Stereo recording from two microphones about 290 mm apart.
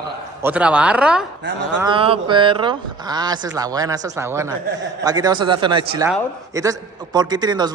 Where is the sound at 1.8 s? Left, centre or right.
Centre.